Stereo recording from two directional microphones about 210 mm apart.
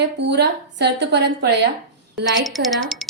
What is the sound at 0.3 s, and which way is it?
A woman's voice, 55° right (ahead or behind).